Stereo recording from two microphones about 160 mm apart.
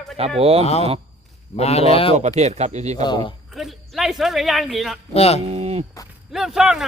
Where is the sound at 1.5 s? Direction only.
40° left (ahead or behind).